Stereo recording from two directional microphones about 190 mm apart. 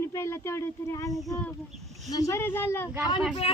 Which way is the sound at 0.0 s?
15° left (ahead or behind).